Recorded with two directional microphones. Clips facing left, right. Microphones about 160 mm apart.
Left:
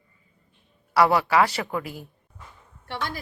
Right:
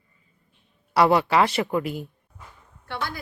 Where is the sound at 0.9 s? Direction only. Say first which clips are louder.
Right 1 dB; 25° right (ahead or behind).